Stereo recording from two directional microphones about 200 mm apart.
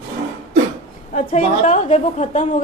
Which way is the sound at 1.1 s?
35° left (ahead or behind).